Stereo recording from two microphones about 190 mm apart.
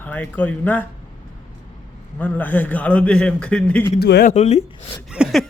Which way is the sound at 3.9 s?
60° left (ahead or behind).